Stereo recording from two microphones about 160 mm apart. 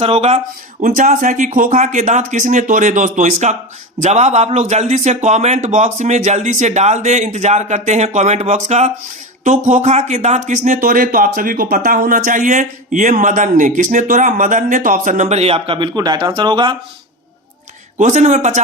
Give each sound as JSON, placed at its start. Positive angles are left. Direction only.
{"t": 0.0, "sound": "speech", "side_deg": -40}
{"t": 17.9, "sound": "speech", "side_deg": -50}